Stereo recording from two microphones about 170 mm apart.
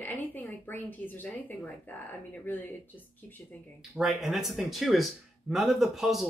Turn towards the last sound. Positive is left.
turn(degrees=0)  # may be behind; listen again after turning